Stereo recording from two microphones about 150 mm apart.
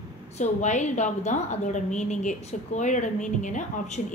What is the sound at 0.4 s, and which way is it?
A woman's voice, 50° left (ahead or behind).